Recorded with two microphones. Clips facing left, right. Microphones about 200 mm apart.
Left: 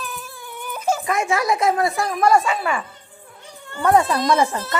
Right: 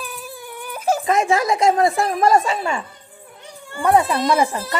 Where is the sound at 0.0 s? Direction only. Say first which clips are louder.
Right 1 dB; 10° right (ahead or behind).